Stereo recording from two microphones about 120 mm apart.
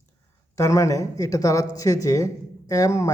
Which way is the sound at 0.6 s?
25° left (ahead or behind).